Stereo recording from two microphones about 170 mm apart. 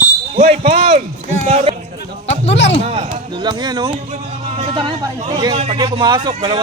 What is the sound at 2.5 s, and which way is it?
Speech, 90° left.